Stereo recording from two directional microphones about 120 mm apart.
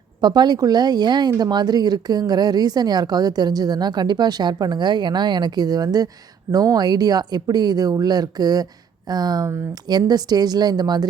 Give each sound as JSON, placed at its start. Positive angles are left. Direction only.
{"t": 0.2, "sound": "speech", "side_deg": -35}